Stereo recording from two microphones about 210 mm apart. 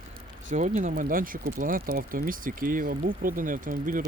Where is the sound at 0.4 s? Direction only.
35° right (ahead or behind).